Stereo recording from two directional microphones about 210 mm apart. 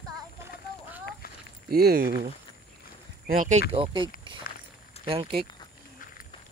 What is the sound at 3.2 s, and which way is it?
Speech, 40° right (ahead or behind).